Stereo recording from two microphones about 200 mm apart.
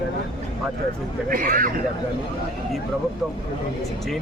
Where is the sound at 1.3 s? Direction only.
45° right (ahead or behind).